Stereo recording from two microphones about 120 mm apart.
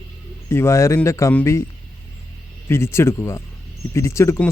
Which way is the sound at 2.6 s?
20° left (ahead or behind).